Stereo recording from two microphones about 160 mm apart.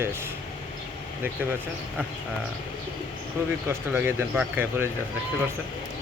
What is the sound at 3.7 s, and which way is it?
Speech, 15° right (ahead or behind).